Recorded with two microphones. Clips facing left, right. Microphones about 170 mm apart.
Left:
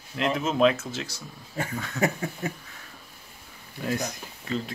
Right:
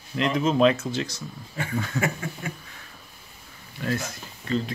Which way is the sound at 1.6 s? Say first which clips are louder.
Even; 40° left (ahead or behind).